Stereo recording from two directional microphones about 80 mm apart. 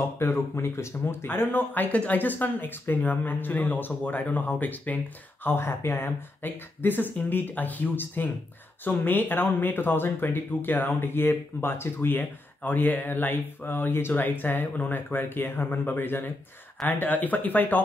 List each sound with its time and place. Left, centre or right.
0.2 s speech: left